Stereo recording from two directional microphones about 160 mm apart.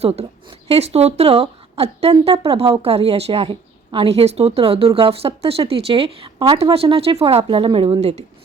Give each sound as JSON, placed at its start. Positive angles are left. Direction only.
{"t": 0.0, "sound": "speech", "side_deg": -40}